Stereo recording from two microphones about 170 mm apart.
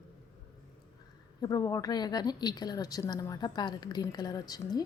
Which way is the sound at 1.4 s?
20° left (ahead or behind).